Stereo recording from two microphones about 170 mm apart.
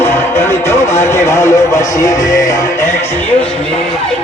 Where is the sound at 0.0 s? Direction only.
15° left (ahead or behind).